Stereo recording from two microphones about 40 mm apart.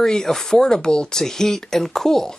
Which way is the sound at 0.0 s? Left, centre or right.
Centre.